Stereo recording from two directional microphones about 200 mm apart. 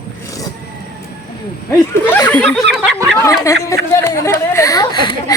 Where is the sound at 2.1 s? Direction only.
10° left (ahead or behind).